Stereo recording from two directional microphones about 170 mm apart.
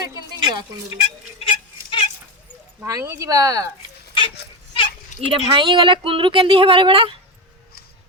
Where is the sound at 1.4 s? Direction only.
30° left (ahead or behind).